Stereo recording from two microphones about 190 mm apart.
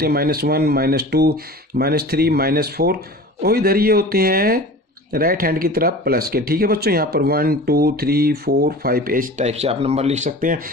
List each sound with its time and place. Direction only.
0.0 s speech: 55° right (ahead or behind)